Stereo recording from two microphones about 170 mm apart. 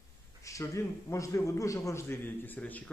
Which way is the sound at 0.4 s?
20° left (ahead or behind).